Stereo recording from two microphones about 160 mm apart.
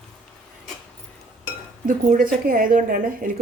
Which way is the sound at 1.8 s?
60° right (ahead or behind).